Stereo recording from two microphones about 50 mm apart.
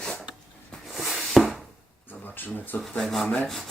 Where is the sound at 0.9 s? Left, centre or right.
Centre.